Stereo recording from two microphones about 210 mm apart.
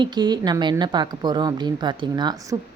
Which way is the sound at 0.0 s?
20° right (ahead or behind).